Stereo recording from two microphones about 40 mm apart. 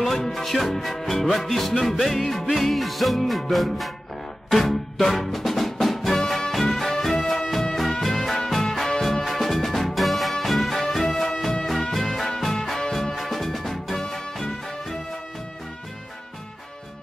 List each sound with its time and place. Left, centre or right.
0.0 s music: centre
9.2 s music: centre
14.0 s music: centre